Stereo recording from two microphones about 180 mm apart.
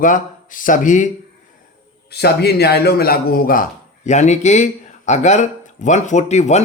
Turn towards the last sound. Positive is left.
turn(degrees=40)  # may be behind; listen again after turning